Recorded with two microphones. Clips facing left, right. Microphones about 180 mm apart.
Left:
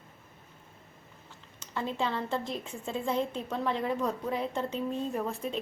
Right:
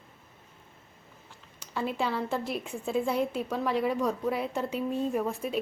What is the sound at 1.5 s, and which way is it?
A woman's voice, 10° right (ahead or behind).